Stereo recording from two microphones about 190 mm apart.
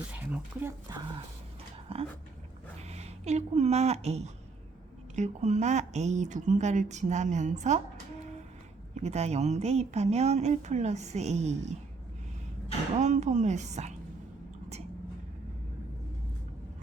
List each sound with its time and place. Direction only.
0.1 s speech: 10° right (ahead or behind)
1.9 s speech: 30° right (ahead or behind)
9.0 s speech: 35° right (ahead or behind)
13.0 s speech: 40° right (ahead or behind)